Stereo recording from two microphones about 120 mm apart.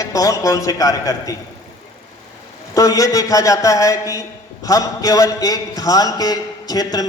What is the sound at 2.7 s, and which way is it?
A man's voice, 30° left (ahead or behind).